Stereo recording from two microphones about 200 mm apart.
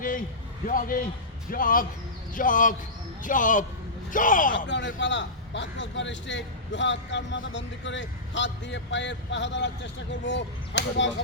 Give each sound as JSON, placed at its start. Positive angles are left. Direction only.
{"t": 0.7, "sound": "a man's voice", "side_deg": 45}
{"t": 4.5, "sound": "a man's voice", "side_deg": 60}